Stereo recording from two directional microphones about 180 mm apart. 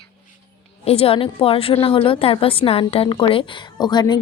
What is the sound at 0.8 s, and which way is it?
A woman's voice, 30° left (ahead or behind).